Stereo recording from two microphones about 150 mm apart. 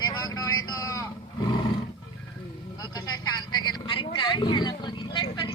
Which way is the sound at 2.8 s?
25° left (ahead or behind).